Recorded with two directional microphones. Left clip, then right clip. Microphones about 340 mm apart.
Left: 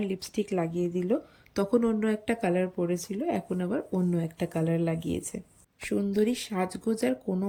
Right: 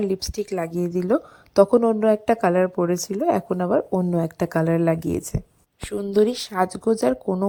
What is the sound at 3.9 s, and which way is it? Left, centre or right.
Speech, right.